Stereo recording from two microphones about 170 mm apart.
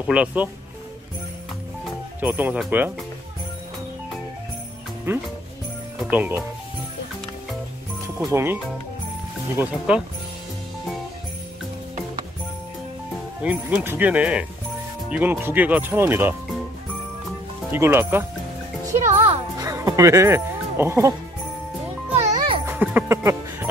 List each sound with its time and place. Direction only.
0.0 s speech: 5° right (ahead or behind)
2.1 s speech: 10° right (ahead or behind)
5.1 s speech: 10° right (ahead or behind)
8.2 s speech: 15° right (ahead or behind)
9.6 s speech: 5° right (ahead or behind)
13.4 s speech: 10° right (ahead or behind)
17.6 s speech: 15° right (ahead or behind)
19.0 s speech: 40° right (ahead or behind)
19.6 s speech: 20° right (ahead or behind)
22.1 s music: 40° right (ahead or behind)
22.7 s music: 10° right (ahead or behind)